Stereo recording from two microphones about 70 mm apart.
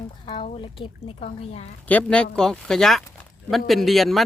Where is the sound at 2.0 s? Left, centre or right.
Centre.